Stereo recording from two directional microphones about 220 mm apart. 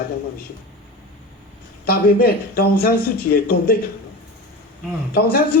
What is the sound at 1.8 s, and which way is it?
A man's voice, 40° left (ahead or behind).